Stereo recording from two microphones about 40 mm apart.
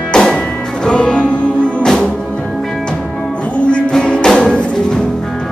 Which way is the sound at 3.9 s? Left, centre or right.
Left.